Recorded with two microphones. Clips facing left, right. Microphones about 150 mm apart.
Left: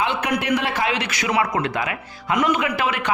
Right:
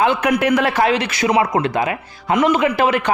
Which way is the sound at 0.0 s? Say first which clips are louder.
Right 7 dB; 45° right (ahead or behind).